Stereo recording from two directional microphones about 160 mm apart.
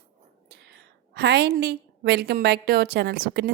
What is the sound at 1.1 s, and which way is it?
A woman's voice, 90° right.